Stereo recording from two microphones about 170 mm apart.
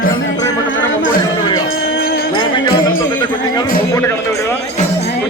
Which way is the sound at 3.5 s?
20° left (ahead or behind).